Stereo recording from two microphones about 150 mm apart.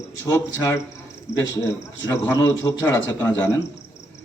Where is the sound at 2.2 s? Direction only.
15° left (ahead or behind).